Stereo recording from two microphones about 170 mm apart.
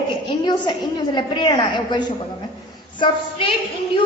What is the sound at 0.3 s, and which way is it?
A woman's voice, 25° left (ahead or behind).